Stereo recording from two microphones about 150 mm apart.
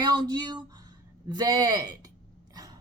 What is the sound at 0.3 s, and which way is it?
Speech, 30° right (ahead or behind).